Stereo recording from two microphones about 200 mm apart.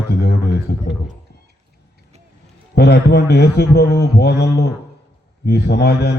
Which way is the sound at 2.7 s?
55° left (ahead or behind).